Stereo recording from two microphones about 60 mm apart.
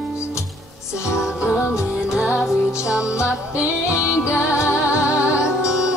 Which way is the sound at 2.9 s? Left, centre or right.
Centre.